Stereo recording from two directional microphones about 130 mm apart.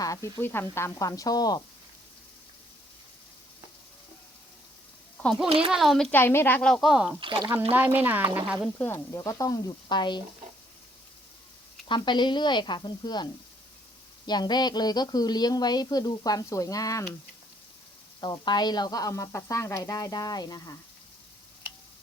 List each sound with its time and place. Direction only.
0.0 s speech: 25° left (ahead or behind)
5.2 s speech: centre (ahead or behind)
5.5 s speech: 45° right (ahead or behind)
5.7 s speech: centre (ahead or behind)
6.1 s a woman's voice: 15° left (ahead or behind)
6.7 s speech: 5° left (ahead or behind)
6.9 s speech: 5° right (ahead or behind)
7.2 s speech: 40° right (ahead or behind)
7.7 s speech: 15° right (ahead or behind)
8.8 s speech: 20° left (ahead or behind)
11.9 s a woman's voice: 35° left (ahead or behind)
14.3 s a woman's voice: 35° left (ahead or behind)
18.2 s speech: 35° left (ahead or behind)